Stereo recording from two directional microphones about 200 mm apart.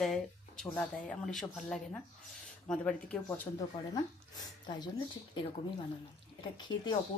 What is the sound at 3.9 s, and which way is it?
Speech, 20° left (ahead or behind).